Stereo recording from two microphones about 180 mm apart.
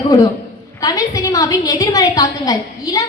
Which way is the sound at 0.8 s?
20° left (ahead or behind).